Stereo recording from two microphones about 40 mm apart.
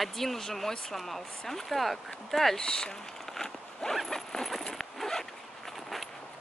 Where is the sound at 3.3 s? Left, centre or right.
Centre.